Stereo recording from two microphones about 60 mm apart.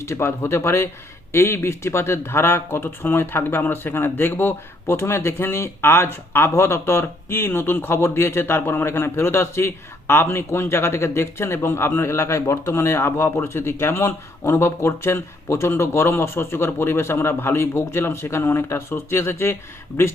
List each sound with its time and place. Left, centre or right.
0.0 s speech: left